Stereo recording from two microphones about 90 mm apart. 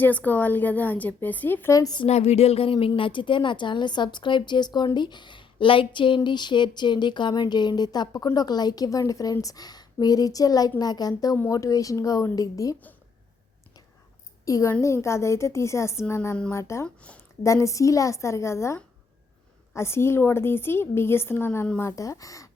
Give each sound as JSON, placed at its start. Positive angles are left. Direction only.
{"t": 0.0, "sound": "a woman's voice", "side_deg": 20}
{"t": 1.7, "sound": "a woman's voice", "side_deg": 40}
{"t": 2.6, "sound": "a woman's voice", "side_deg": 90}
{"t": 14.4, "sound": "a woman's voice", "side_deg": 40}
{"t": 16.8, "sound": "speech", "side_deg": 15}
{"t": 17.4, "sound": "a woman's voice", "side_deg": 35}